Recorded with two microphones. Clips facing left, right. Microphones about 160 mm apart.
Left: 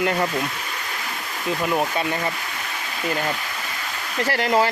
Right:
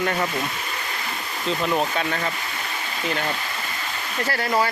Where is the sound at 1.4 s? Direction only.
10° left (ahead or behind).